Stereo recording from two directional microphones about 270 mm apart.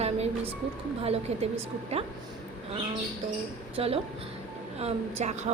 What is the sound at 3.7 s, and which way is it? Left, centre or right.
A woman's voice, right.